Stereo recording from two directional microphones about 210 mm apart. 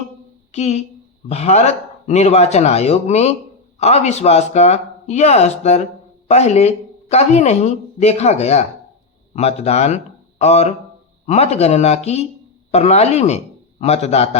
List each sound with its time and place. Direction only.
0.5 s a man's voice: 30° left (ahead or behind)